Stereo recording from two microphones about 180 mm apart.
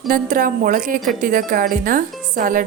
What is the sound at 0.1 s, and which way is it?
Speech, 50° right (ahead or behind).